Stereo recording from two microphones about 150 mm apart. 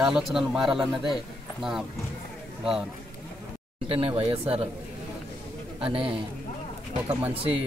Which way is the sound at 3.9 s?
40° right (ahead or behind).